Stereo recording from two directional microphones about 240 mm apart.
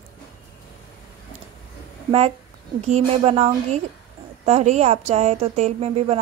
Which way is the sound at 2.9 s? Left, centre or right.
Right.